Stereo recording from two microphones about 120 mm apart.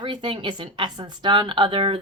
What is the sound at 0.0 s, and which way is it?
Speech, 45° right (ahead or behind).